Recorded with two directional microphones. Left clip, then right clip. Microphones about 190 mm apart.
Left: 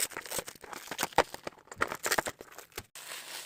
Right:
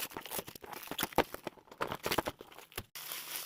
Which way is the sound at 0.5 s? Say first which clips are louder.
Left 3 dB; 15° right (ahead or behind).